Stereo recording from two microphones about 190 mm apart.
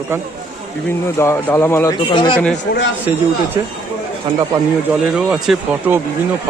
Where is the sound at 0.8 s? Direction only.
10° left (ahead or behind).